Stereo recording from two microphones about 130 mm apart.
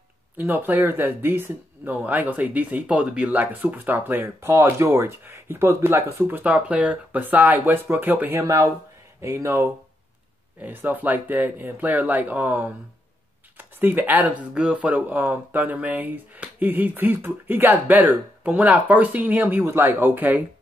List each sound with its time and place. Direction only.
0.4 s speech: 15° right (ahead or behind)